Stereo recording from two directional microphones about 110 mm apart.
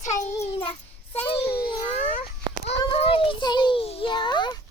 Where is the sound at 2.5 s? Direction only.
45° right (ahead or behind).